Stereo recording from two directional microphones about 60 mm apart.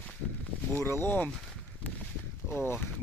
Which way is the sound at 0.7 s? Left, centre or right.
Left.